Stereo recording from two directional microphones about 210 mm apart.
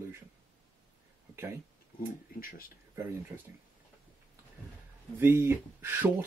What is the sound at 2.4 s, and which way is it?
Speech, 40° left (ahead or behind).